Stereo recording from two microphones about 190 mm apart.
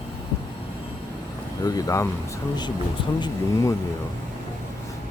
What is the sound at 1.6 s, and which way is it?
Speech, 20° left (ahead or behind).